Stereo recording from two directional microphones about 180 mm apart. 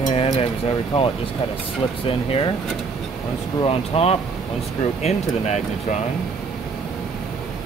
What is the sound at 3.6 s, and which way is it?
Speech, 35° left (ahead or behind).